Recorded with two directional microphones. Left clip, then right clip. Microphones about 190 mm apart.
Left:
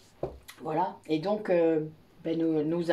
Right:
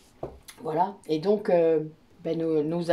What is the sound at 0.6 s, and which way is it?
Speech, 50° right (ahead or behind).